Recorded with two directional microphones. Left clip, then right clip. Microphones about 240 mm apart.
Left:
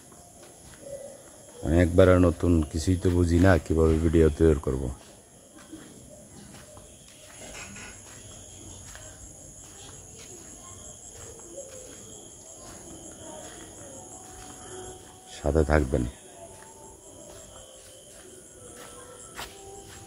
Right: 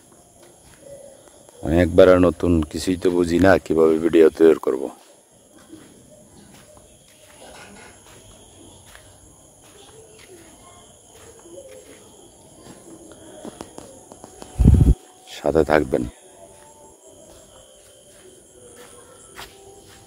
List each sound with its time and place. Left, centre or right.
1.6 s speech: right
15.2 s cricket: right